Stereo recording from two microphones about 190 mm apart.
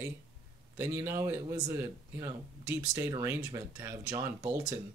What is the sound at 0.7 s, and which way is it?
Speech, 15° right (ahead or behind).